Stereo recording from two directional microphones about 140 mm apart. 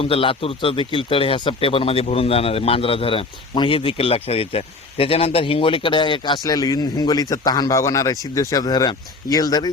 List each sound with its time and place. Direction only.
0.0 s speech: 40° left (ahead or behind)